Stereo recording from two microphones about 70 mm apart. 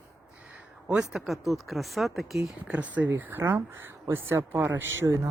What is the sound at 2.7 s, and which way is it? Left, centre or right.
Speech, right.